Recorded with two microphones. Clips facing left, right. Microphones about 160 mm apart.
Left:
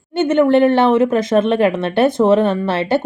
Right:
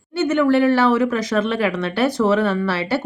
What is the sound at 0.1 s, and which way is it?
A woman's voice, 25° left (ahead or behind).